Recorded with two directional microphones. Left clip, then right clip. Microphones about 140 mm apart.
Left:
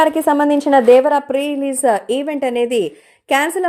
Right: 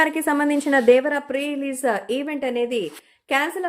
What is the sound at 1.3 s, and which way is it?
A woman's voice, 25° left (ahead or behind).